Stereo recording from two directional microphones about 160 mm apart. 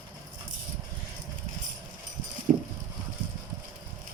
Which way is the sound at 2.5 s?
45° right (ahead or behind).